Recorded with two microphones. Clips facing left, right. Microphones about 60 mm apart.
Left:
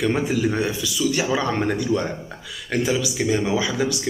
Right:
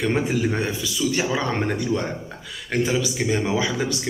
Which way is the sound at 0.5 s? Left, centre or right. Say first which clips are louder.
Left 2 dB; right.